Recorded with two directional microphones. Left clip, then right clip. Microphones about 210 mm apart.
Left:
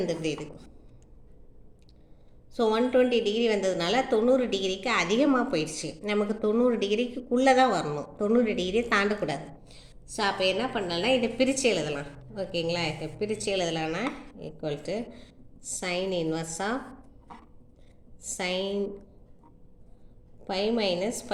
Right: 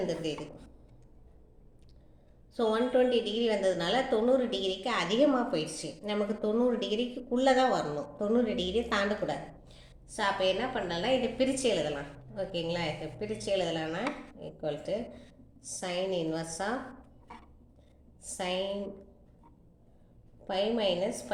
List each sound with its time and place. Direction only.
0.1 s speech: 35° left (ahead or behind)
2.6 s speech: 35° left (ahead or behind)
18.2 s a woman's voice: 35° left (ahead or behind)
20.4 s speech: 35° left (ahead or behind)